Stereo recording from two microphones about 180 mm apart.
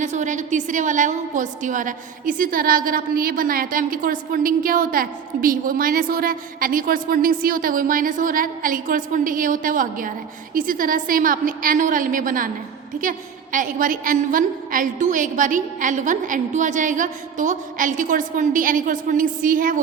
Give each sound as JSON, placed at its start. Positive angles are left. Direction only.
{"t": 0.0, "sound": "a woman's voice", "side_deg": -40}